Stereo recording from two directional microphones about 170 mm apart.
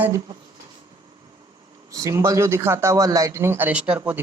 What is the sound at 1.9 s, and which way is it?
A man's voice, 20° right (ahead or behind).